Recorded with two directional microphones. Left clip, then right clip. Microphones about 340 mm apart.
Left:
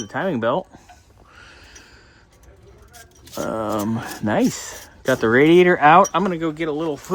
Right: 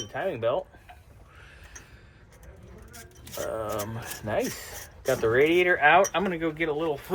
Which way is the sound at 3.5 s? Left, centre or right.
Left.